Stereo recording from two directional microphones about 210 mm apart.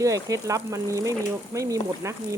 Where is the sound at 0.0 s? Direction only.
15° right (ahead or behind).